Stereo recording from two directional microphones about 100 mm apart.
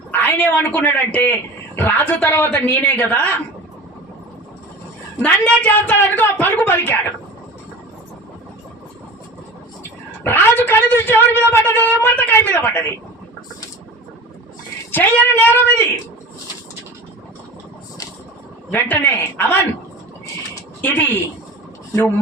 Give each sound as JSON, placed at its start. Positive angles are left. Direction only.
{"t": 0.1, "sound": "a man's voice", "side_deg": 20}
{"t": 5.2, "sound": "a man's voice", "side_deg": 10}
{"t": 10.2, "sound": "a man's voice", "side_deg": 25}
{"t": 14.9, "sound": "a man's voice", "side_deg": 20}
{"t": 18.7, "sound": "a man's voice", "side_deg": 25}
{"t": 20.8, "sound": "a man's voice", "side_deg": 20}